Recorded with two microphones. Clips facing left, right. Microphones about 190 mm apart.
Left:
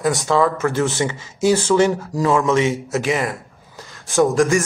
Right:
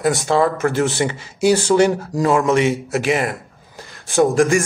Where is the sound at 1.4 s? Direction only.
15° right (ahead or behind).